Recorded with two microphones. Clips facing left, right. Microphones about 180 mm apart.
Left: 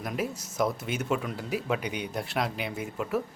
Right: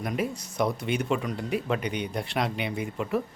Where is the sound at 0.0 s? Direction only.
Centre (ahead or behind).